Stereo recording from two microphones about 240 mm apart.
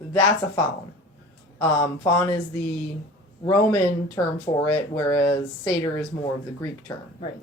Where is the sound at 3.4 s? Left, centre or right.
Centre.